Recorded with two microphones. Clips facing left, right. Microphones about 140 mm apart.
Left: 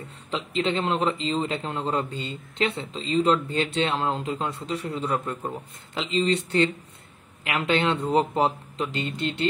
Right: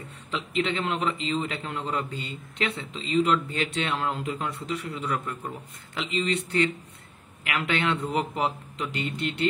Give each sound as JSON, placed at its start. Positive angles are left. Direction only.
{"t": 0.0, "sound": "a man's voice", "side_deg": 30}